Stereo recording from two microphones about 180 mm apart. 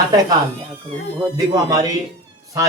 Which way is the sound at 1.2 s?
20° right (ahead or behind).